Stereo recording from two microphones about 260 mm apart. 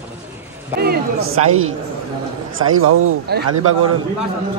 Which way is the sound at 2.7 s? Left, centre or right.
Right.